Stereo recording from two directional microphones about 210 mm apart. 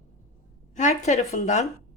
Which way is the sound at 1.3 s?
35° left (ahead or behind).